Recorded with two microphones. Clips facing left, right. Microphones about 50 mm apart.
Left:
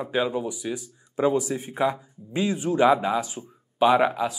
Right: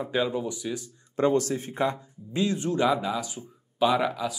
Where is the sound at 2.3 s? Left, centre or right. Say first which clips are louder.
Left 2 dB; centre.